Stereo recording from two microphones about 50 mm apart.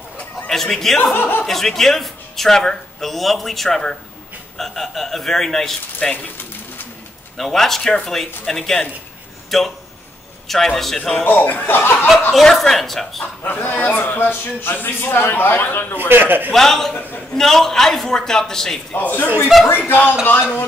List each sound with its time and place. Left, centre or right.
0.5 s a man's voice: centre
1.1 s a man's voice: left
1.4 s a man's voice: centre
7.3 s a man's voice: centre
11.2 s speech: left
12.3 s a man's voice: centre
13.4 s a man's voice: left
16.1 s a man's voice: right
16.5 s a man's voice: centre
16.9 s speech: left
17.4 s a man's voice: centre
18.9 s a man's voice: left